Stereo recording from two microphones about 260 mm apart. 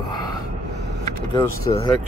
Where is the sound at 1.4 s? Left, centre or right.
Centre.